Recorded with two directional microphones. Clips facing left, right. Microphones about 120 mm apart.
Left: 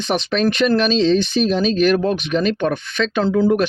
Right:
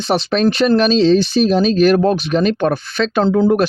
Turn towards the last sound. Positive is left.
turn(degrees=-40)  # may be behind; listen again after turning